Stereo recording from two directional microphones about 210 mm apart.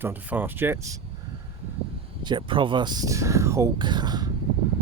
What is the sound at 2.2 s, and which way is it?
Speech, 25° right (ahead or behind).